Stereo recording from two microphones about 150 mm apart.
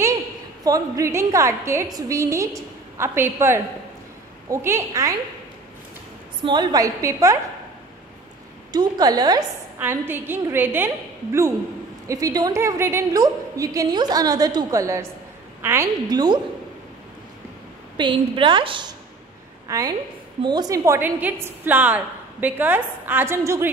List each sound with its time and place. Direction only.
0.7 s a woman's voice: 25° right (ahead or behind)
6.4 s a woman's voice: 30° right (ahead or behind)
8.7 s a woman's voice: 25° right (ahead or behind)
9.8 s a woman's voice: 15° right (ahead or behind)
12.1 s a woman's voice: 25° right (ahead or behind)
16.1 s a woman's voice: 30° right (ahead or behind)
17.9 s a woman's voice: 35° right (ahead or behind); by 23.7 s 15° right (ahead or behind)